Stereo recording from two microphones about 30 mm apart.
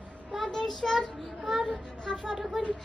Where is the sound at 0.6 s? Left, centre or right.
Centre.